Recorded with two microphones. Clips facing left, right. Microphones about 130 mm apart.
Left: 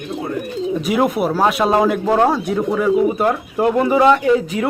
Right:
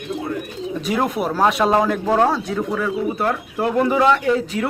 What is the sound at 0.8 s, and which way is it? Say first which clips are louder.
Speech: left 3 dB; 10° left (ahead or behind).